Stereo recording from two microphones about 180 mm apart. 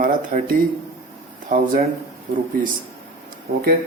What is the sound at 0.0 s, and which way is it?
Speech, 50° right (ahead or behind).